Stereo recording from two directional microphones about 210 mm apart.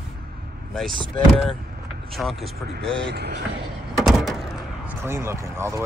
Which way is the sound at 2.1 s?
Centre (ahead or behind).